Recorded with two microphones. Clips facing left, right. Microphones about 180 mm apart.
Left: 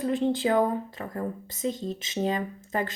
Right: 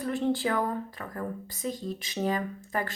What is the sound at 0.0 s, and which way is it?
A woman's voice, 20° left (ahead or behind).